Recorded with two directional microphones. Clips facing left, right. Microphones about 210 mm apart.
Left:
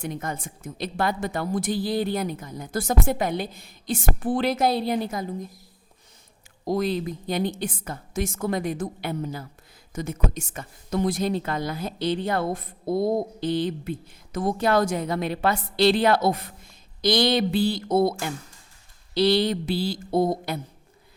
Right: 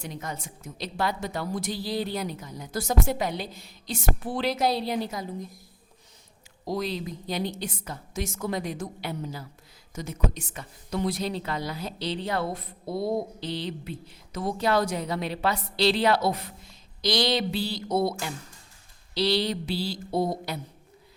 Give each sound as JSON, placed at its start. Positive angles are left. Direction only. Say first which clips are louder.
{"t": 0.0, "sound": "a woman's voice", "louder": "left 5 dB", "side_deg": 50}
{"t": 6.7, "sound": "a woman's voice", "louder": "left 5 dB", "side_deg": 50}